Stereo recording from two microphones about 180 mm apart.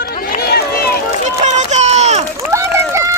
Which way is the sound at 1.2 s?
40° right (ahead or behind).